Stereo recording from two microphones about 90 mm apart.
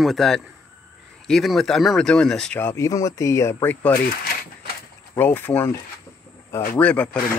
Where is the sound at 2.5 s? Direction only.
30° left (ahead or behind).